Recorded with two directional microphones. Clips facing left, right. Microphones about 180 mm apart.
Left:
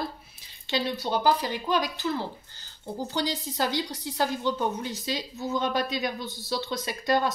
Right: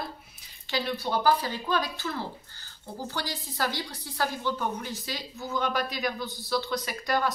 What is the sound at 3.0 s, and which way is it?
A woman's voice, 20° left (ahead or behind).